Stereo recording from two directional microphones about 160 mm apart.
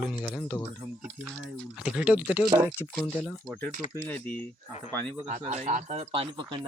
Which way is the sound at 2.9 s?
10° left (ahead or behind).